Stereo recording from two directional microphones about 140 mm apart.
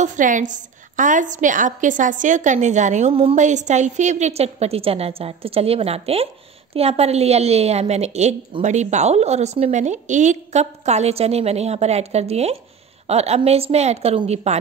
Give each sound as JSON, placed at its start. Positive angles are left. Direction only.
{"t": 0.0, "sound": "a woman's voice", "side_deg": -65}
{"t": 3.1, "sound": "a woman's voice", "side_deg": -40}
{"t": 3.3, "sound": "a woman's voice", "side_deg": -60}